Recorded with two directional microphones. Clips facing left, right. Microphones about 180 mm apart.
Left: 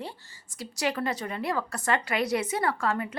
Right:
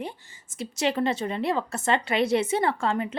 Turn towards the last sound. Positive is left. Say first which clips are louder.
# right 2 dB
turn(degrees=-25)  # may be behind; listen again after turning